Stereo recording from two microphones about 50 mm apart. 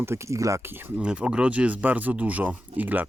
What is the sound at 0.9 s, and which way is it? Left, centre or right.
Speech, right.